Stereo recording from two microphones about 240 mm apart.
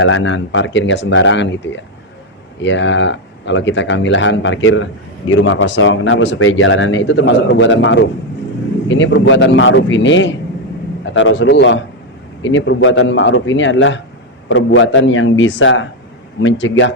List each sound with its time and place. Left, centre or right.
0.0 s speech: left